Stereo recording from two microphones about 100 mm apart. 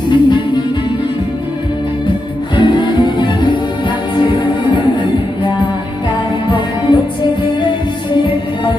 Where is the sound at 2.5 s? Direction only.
50° left (ahead or behind).